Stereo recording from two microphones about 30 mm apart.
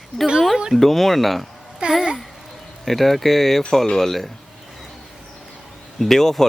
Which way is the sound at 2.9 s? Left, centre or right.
Centre.